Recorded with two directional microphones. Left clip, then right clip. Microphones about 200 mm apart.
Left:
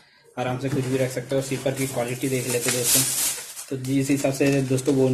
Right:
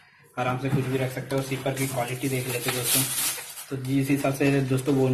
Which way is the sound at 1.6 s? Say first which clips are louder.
Left 2 dB; 70° left (ahead or behind).